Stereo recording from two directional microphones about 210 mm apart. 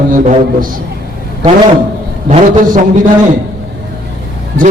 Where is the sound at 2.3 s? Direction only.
40° right (ahead or behind).